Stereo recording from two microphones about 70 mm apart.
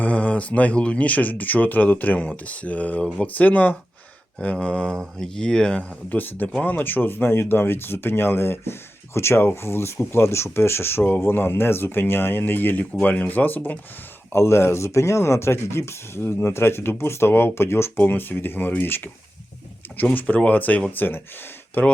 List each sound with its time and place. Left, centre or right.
0.0 s speech: centre
6.1 s speech: left
14.3 s speech: left